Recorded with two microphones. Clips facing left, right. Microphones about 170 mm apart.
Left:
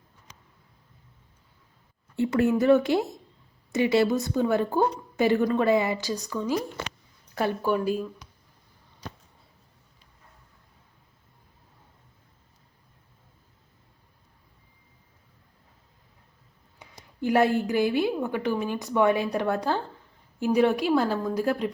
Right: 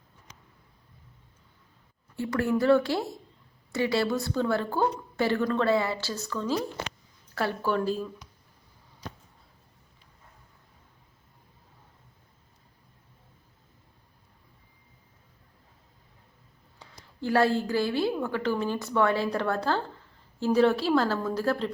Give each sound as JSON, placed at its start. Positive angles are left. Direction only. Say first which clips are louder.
{"t": 2.1, "sound": "a woman's voice", "louder": "left 4 dB", "side_deg": 20}
{"t": 16.8, "sound": "a woman's voice", "louder": "left 4 dB", "side_deg": 15}